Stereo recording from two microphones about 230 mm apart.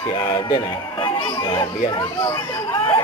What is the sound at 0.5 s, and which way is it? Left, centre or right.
Speech, left.